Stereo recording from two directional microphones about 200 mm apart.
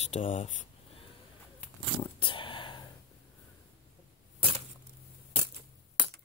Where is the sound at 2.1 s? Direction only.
25° left (ahead or behind).